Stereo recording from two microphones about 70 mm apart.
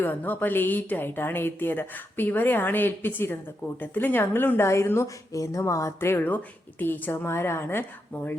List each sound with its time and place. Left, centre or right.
0.0 s a woman's voice: left
5.0 s speech: left